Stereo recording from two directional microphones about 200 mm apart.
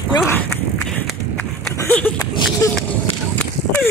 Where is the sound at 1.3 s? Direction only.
10° left (ahead or behind).